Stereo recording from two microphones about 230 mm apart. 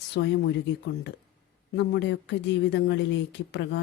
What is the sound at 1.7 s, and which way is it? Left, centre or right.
Speech, left.